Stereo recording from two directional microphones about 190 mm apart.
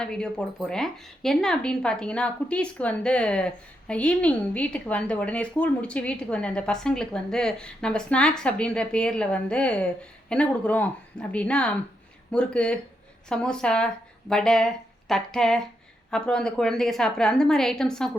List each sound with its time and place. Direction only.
0.0 s a woman's voice: 5° left (ahead or behind)